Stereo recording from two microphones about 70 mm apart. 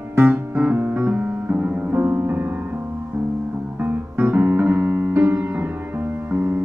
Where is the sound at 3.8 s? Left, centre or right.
Right.